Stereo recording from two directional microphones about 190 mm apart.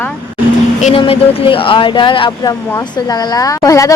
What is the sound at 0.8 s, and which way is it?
Speech, 30° left (ahead or behind).